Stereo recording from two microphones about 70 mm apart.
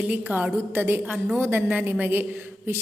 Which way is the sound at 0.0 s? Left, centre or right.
Right.